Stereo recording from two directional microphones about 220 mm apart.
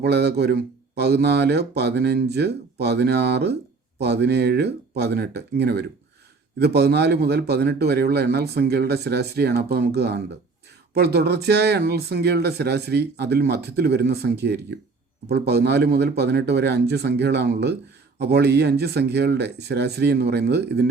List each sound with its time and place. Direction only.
0.0 s speech: 50° right (ahead or behind)